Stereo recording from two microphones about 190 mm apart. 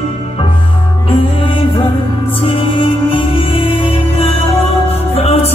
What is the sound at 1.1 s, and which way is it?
Music, 30° left (ahead or behind).